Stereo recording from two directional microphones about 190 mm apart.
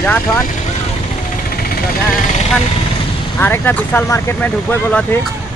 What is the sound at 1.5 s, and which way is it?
Vehicle, 50° left (ahead or behind).